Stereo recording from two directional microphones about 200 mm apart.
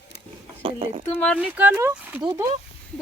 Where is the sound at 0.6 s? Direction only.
30° right (ahead or behind).